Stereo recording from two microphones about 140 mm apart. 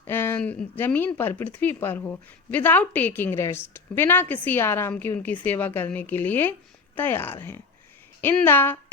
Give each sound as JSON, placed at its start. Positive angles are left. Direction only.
{"t": 0.1, "sound": "speech", "side_deg": 15}